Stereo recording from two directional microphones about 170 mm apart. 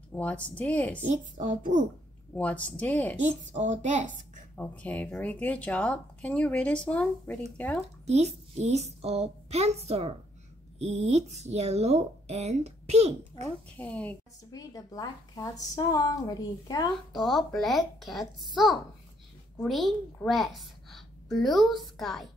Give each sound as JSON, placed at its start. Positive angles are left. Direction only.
{"t": 0.1, "sound": "speech", "side_deg": 10}
{"t": 1.4, "sound": "a woman's voice", "side_deg": -45}
{"t": 2.3, "sound": "speech", "side_deg": 10}
{"t": 3.2, "sound": "a woman's voice", "side_deg": -45}
{"t": 4.6, "sound": "speech", "side_deg": 10}
{"t": 8.1, "sound": "speech", "side_deg": -40}
{"t": 13.7, "sound": "speech", "side_deg": 10}
{"t": 14.5, "sound": "a woman's voice", "side_deg": 20}
{"t": 17.1, "sound": "a child's voice", "side_deg": 0}